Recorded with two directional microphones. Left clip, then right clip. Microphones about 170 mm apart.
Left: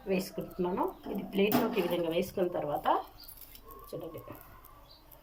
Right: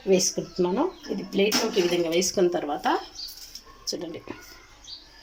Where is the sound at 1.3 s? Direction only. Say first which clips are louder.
Right 6 dB; 30° right (ahead or behind).